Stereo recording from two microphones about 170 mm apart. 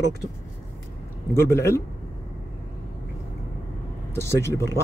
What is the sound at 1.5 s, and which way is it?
Speech, 15° left (ahead or behind).